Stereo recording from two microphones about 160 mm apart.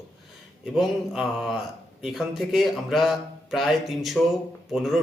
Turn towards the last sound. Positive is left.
turn(degrees=0)  # may be behind; listen again after turning